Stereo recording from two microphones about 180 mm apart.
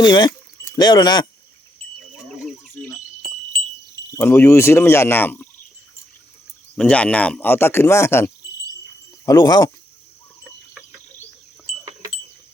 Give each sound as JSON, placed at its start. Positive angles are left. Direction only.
{"t": 0.0, "sound": "speech", "side_deg": 25}
{"t": 4.1, "sound": "speech", "side_deg": 10}
{"t": 6.7, "sound": "speech", "side_deg": 5}